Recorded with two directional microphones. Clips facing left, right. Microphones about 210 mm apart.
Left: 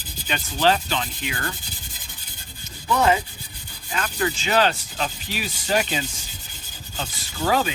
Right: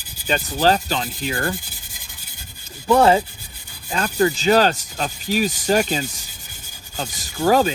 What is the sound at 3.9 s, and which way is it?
Speech, 40° right (ahead or behind).